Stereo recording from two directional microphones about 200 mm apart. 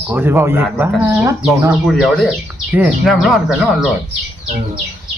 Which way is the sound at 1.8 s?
Centre (ahead or behind).